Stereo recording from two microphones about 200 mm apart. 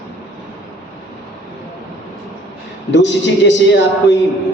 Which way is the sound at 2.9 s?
65° left (ahead or behind).